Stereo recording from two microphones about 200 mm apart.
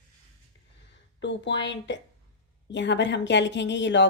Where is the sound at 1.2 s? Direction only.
65° left (ahead or behind).